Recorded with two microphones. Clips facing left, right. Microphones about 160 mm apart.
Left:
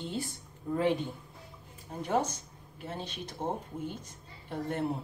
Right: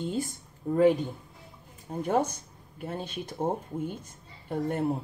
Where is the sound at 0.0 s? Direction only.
45° right (ahead or behind).